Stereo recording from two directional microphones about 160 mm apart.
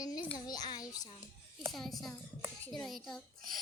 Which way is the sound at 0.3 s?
25° left (ahead or behind).